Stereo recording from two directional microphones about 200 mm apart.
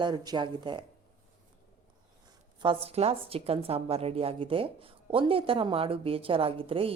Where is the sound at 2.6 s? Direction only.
30° right (ahead or behind).